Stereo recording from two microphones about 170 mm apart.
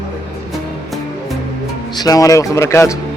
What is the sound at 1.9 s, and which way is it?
Speech, 20° left (ahead or behind).